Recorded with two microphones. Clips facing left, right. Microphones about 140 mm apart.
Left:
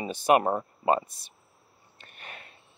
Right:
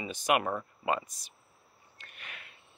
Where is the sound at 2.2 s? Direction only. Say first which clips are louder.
Left 4 dB; 35° left (ahead or behind).